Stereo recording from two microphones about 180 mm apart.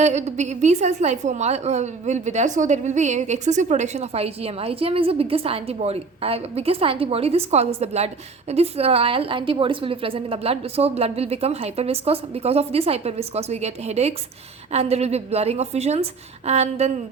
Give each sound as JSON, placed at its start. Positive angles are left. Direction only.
{"t": 0.0, "sound": "a woman's voice", "side_deg": -40}